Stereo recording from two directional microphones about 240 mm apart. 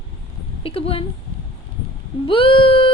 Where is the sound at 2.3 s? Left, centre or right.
Left.